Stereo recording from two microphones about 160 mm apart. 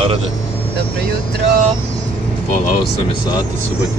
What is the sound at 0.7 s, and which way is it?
Speech, 90° right.